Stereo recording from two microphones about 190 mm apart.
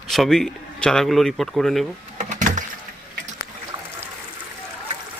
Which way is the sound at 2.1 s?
40° right (ahead or behind).